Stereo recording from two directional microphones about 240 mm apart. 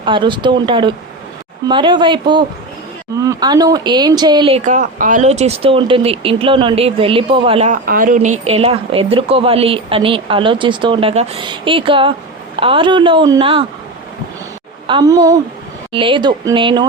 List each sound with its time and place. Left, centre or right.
0.0 s speech: centre
14.8 s a woman's voice: centre